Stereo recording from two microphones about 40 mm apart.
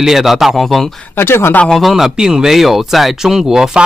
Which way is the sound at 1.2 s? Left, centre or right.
Left.